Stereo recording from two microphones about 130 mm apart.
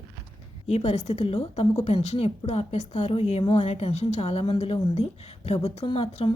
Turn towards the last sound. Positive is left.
turn(degrees=50)  # may be behind; listen again after turning